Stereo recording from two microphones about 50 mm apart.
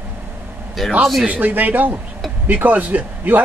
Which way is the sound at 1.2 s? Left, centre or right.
Right.